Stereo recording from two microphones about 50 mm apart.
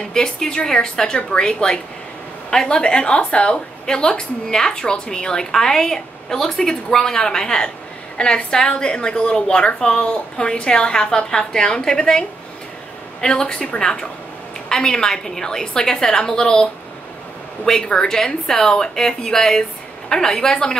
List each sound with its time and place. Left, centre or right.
0.1 s a woman's voice: centre
17.6 s a woman's voice: centre